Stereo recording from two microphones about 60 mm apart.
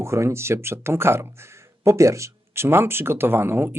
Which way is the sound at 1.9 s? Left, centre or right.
Right.